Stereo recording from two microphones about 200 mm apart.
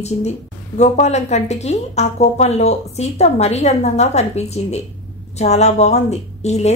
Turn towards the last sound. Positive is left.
turn(degrees=35)  # may be behind; listen again after turning